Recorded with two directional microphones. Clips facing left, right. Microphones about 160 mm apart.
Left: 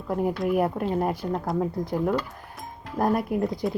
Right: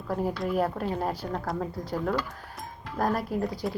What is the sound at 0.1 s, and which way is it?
Speech, 15° left (ahead or behind).